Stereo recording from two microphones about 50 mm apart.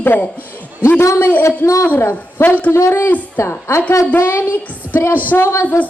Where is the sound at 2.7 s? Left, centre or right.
Left.